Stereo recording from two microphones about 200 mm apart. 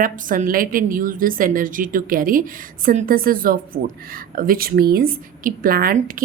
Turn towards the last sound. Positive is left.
turn(degrees=-45)  # may be behind; listen again after turning